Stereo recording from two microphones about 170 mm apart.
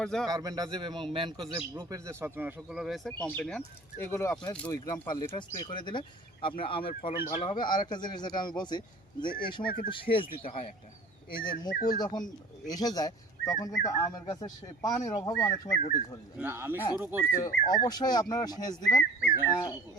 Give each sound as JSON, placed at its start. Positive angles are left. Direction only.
{"t": 0.0, "sound": "speech", "side_deg": 0}
{"t": 0.3, "sound": "a man's voice", "side_deg": -20}
{"t": 1.7, "sound": "speech", "side_deg": -15}
{"t": 9.6, "sound": "speech", "side_deg": 55}
{"t": 9.9, "sound": "speech", "side_deg": 30}
{"t": 11.7, "sound": "speech", "side_deg": 55}
{"t": 11.9, "sound": "speech", "side_deg": 25}
{"t": 16.4, "sound": "speech", "side_deg": -15}
{"t": 17.3, "sound": "speech", "side_deg": 20}